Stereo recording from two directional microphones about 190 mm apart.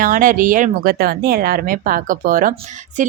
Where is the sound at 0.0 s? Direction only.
45° right (ahead or behind).